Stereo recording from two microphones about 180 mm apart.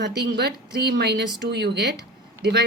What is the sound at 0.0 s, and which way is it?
A woman's voice, 70° right (ahead or behind).